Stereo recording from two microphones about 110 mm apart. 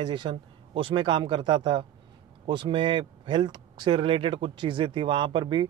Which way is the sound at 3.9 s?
55° right (ahead or behind).